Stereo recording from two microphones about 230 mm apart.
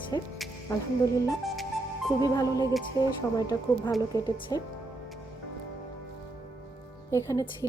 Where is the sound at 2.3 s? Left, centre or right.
Centre.